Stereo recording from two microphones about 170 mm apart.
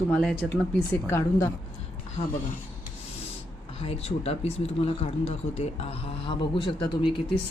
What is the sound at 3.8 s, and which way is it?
Speech, 35° left (ahead or behind).